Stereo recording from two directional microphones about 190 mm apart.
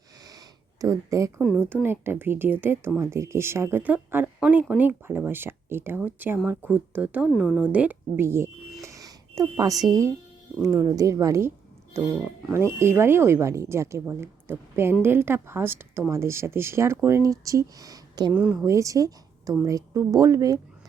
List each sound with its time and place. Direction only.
0.3 s a sound: 20° right (ahead or behind)
1.4 s a woman's voice: 5° right (ahead or behind)
8.9 s a sound: 15° right (ahead or behind)
10.6 s a woman's voice: 15° right (ahead or behind)
12.5 s a woman's voice: 15° right (ahead or behind)
18.3 s a woman's voice: 10° right (ahead or behind)